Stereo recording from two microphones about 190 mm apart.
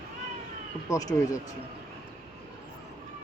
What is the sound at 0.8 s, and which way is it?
Speech, 20° left (ahead or behind).